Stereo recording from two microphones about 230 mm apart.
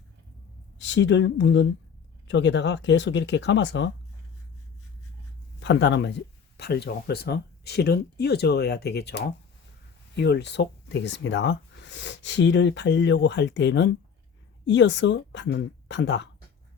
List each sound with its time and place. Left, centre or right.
0.8 s speech: left
5.5 s speech: left